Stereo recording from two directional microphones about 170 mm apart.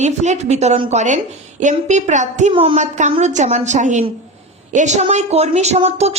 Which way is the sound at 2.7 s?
45° right (ahead or behind).